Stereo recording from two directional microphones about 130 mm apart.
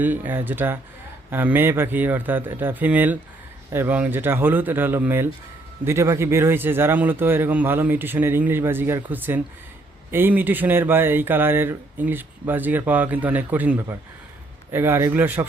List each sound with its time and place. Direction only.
0.0 s speech: 15° right (ahead or behind)